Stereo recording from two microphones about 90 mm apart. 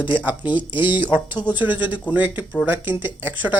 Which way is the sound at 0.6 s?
65° left (ahead or behind).